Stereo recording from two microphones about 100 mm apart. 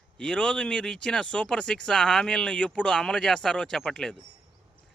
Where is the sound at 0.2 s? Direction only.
10° left (ahead or behind).